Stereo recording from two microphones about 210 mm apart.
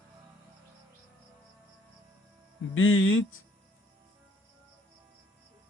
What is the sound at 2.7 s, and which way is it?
Speech, 75° left (ahead or behind).